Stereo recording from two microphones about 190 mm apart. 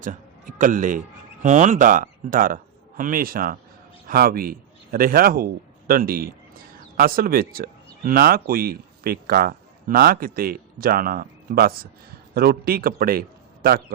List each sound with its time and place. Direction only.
0.0 s a man's voice: 45° right (ahead or behind)